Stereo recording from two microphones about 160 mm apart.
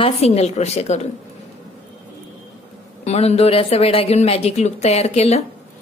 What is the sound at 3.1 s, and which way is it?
A woman's voice, 40° left (ahead or behind).